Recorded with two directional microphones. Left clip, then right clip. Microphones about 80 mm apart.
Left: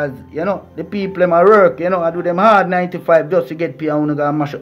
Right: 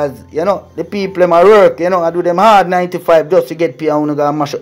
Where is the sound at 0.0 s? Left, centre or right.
Right.